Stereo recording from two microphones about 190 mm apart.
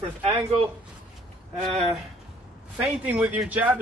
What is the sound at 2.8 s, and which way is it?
Speech, 5° right (ahead or behind).